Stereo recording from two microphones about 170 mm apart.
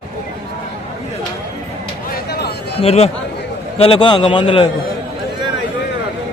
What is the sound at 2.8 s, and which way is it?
A man's voice, 35° left (ahead or behind).